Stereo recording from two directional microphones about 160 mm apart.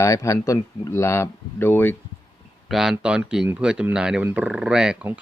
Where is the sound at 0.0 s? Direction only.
20° left (ahead or behind).